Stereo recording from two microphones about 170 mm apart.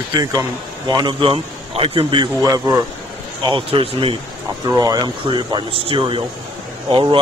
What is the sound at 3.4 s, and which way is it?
Speech, 30° right (ahead or behind).